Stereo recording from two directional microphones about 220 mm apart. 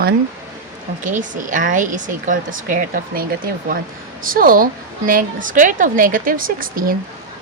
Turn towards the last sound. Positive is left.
turn(degrees=-40)  # may be behind; listen again after turning